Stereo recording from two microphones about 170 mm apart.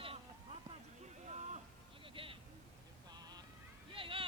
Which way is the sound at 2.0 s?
30° right (ahead or behind).